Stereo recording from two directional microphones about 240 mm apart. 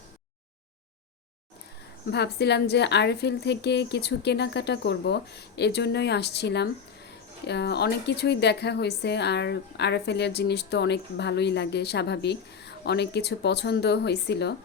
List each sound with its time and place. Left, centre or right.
2.0 s a woman's voice: left